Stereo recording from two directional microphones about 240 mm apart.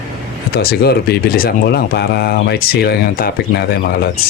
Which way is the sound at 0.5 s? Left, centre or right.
Left.